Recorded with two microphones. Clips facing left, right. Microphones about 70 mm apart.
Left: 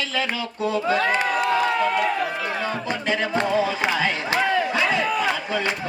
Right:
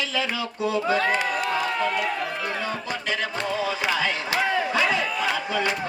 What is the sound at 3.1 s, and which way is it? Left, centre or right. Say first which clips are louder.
Music: left 5 dB; left.